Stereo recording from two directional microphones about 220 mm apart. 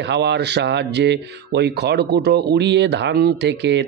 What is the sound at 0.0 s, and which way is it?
Speech, 50° right (ahead or behind).